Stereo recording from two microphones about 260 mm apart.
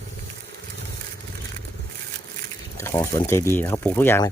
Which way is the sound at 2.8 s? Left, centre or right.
Centre.